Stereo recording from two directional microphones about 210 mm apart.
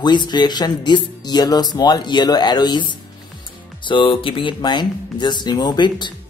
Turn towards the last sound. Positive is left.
turn(degrees=20)  # may be behind; listen again after turning